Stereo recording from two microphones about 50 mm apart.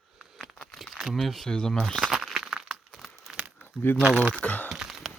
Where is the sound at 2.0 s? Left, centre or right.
Centre.